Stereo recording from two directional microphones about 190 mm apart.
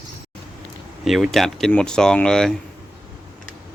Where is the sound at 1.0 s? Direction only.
Centre (ahead or behind).